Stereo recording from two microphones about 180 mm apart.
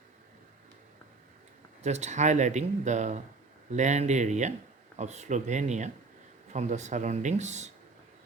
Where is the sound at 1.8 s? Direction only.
40° right (ahead or behind).